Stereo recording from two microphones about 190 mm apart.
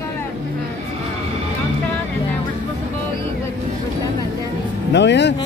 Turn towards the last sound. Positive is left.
turn(degrees=65)  # may be behind; listen again after turning